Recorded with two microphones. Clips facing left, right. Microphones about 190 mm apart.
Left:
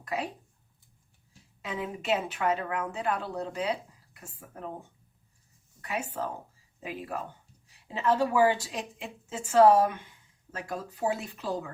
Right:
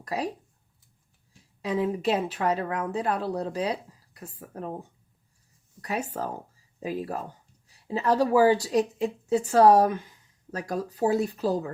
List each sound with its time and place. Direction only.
0.0 s speech: 35° right (ahead or behind)
1.6 s speech: 35° right (ahead or behind)
5.8 s speech: 40° right (ahead or behind)